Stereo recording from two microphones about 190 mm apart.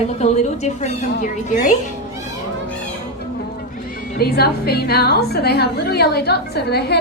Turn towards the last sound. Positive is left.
turn(degrees=60)  # may be behind; listen again after turning